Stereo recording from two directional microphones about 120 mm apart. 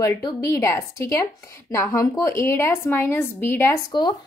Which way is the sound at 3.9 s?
40° left (ahead or behind).